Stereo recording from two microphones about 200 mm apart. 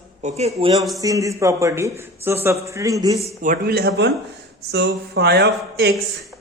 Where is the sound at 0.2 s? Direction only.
35° right (ahead or behind).